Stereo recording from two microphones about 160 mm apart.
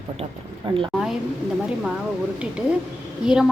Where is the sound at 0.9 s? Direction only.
Centre (ahead or behind).